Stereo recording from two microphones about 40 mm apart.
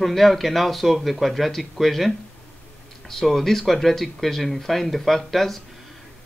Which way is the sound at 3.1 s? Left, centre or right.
Centre.